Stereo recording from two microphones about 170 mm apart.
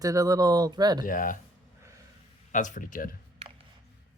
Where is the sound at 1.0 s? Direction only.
55° left (ahead or behind).